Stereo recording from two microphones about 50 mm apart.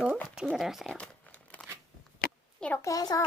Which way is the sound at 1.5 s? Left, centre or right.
Left.